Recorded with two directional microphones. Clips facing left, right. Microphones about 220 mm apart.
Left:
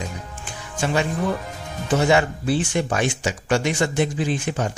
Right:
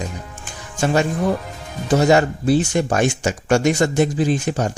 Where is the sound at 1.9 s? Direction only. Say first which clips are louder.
Right 4 dB; 40° right (ahead or behind).